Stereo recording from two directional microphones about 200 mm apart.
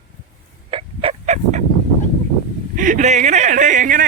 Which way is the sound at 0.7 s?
30° right (ahead or behind).